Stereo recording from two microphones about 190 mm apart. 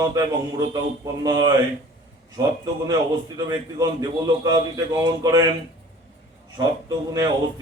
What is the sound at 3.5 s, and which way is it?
A man's voice, 20° right (ahead or behind).